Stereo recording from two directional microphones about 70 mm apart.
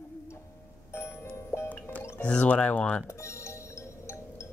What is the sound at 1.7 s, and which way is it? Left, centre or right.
Music, left.